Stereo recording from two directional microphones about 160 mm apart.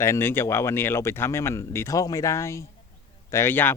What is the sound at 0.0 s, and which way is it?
Speech, 15° left (ahead or behind).